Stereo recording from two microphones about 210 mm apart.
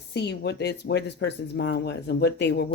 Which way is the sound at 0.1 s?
55° left (ahead or behind).